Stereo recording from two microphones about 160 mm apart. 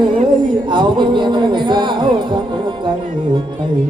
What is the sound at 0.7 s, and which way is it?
Speech, 30° right (ahead or behind).